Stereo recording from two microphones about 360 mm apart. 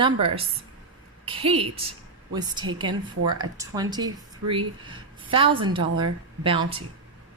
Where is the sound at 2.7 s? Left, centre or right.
Centre.